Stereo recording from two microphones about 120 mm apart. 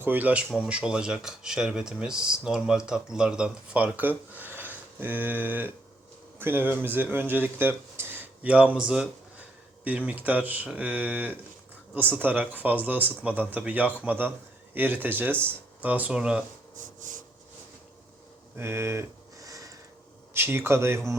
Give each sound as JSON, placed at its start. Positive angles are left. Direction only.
{"t": 0.0, "sound": "speech", "side_deg": -15}
{"t": 10.1, "sound": "speech", "side_deg": -15}
{"t": 16.7, "sound": "wood", "side_deg": -90}
{"t": 18.5, "sound": "a sound", "side_deg": -20}
{"t": 20.3, "sound": "speech", "side_deg": -20}